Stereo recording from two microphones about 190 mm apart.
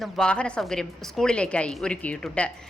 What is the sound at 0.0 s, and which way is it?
A woman's voice, 5° left (ahead or behind).